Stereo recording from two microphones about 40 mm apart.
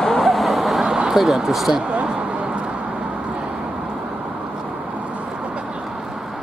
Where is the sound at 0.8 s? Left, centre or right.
Centre.